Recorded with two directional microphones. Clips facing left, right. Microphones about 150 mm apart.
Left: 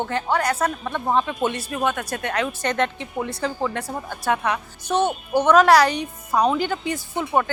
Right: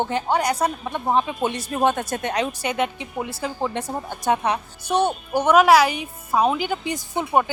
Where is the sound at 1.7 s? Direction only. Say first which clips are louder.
Right 3 dB; 30° right (ahead or behind).